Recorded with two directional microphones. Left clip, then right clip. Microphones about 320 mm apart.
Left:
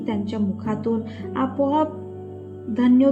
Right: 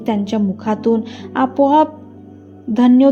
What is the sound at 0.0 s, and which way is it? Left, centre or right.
Speech, right.